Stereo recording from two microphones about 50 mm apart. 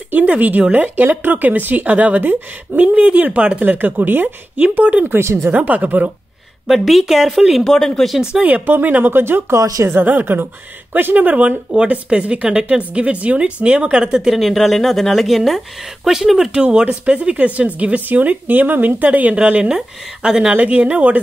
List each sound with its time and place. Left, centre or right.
0.3 s a woman's voice: right
3.6 s a woman's voice: right
5.2 s speech: right
5.5 s a woman's voice: right
6.7 s speech: centre
7.6 s speech: centre
8.2 s speech: centre
8.5 s a woman's voice: right
9.5 s speech: right
9.8 s a woman's voice: right; by 14.3 s centre
14.3 s speech: centre
16.6 s a woman's voice: right
19.6 s speech: centre
20.5 s a woman's voice: right